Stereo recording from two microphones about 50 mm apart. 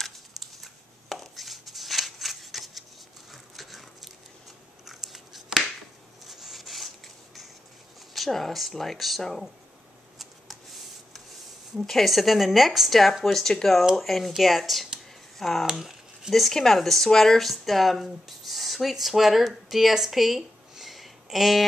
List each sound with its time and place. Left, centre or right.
0.6 s a sound: centre
3.3 s dog: centre
4.8 s biting: centre
6.2 s rub: centre
8.1 s speech: centre
10.1 s a sound: centre
11.8 s speech: centre
15.3 s a sound: centre
15.8 s speech: centre